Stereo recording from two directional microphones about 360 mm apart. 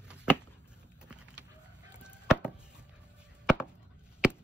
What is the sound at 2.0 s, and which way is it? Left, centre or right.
Chop, centre.